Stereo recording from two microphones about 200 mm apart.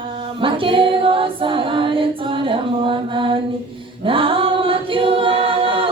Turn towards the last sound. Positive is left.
turn(degrees=-25)  # may be behind; listen again after turning